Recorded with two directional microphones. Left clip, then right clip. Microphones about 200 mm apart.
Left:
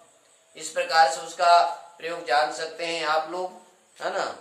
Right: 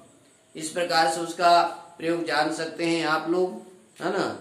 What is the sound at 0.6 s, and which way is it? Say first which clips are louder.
Speech: left 3 dB; centre (ahead or behind).